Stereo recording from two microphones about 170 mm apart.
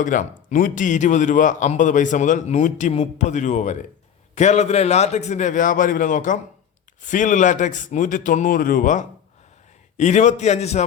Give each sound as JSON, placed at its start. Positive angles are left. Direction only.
{"t": 0.0, "sound": "a man's voice", "side_deg": 50}